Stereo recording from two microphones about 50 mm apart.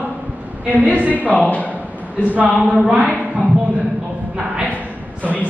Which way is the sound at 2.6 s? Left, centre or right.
Right.